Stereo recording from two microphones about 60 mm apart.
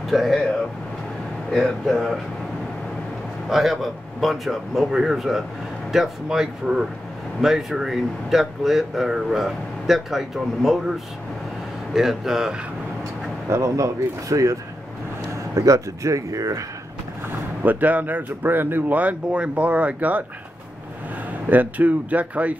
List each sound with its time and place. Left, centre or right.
0.1 s speech: centre
1.5 s speech: centre
3.4 s speech: centre
11.9 s speech: centre
13.5 s speech: right
17.6 s speech: right
18.9 s speech: centre
21.5 s speech: right